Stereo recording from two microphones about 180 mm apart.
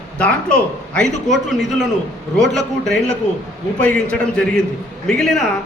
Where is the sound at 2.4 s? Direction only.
Centre (ahead or behind).